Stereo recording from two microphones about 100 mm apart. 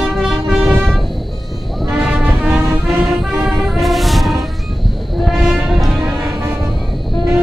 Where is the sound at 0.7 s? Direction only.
Centre (ahead or behind).